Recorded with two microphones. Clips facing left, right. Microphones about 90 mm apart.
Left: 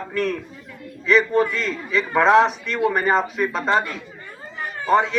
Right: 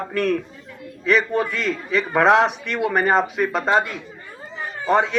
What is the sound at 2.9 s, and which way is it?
Speech, 45° right (ahead or behind).